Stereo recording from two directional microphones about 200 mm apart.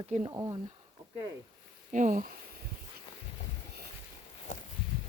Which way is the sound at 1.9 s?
40° right (ahead or behind).